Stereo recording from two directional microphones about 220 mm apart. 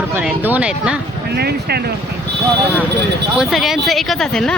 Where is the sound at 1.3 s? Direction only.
45° right (ahead or behind).